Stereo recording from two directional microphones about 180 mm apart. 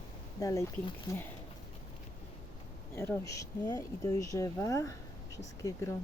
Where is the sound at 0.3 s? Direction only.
20° left (ahead or behind).